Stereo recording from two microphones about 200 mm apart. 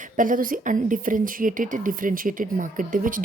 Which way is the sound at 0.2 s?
45° right (ahead or behind).